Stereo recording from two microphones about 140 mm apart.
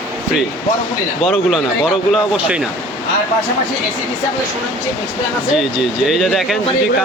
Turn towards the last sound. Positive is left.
turn(degrees=0)  # may be behind; listen again after turning